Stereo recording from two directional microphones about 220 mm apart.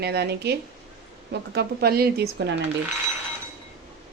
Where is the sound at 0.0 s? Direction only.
50° right (ahead or behind).